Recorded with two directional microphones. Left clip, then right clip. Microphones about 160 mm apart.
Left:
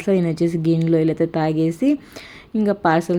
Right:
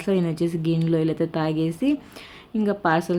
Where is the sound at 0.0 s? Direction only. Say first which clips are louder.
Left 4 dB; 25° left (ahead or behind).